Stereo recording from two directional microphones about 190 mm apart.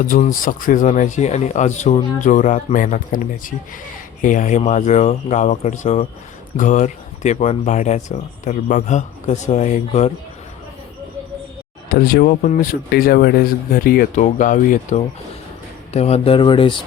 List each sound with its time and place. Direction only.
0.0 s speech: 45° left (ahead or behind)
11.9 s speech: 50° left (ahead or behind); by 16.8 s 25° left (ahead or behind)